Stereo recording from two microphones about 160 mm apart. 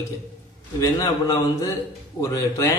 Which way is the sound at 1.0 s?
20° left (ahead or behind).